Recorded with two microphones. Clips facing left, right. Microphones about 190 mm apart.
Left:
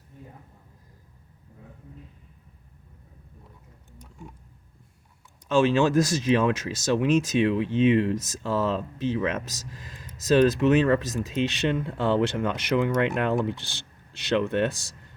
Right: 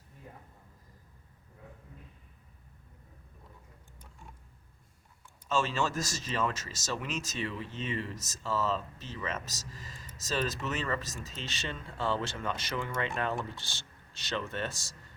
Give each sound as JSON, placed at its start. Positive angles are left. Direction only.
{"t": 5.5, "sound": "speech", "side_deg": 60}